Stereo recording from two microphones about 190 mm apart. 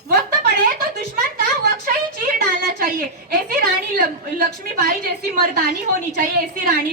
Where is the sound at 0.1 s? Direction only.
50° right (ahead or behind).